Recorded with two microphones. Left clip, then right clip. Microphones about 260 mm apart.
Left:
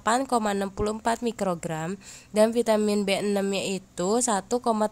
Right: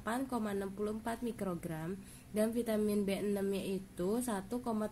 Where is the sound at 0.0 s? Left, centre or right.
Left.